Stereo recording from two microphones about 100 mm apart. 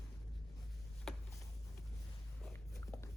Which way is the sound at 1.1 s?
5° left (ahead or behind).